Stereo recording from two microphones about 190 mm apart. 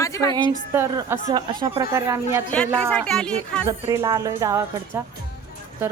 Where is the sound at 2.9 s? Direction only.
5° left (ahead or behind).